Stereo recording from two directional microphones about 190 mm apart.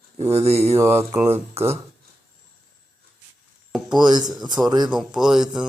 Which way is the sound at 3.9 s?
20° right (ahead or behind).